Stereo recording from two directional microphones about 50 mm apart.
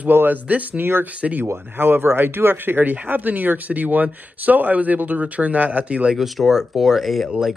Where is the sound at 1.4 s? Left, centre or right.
Right.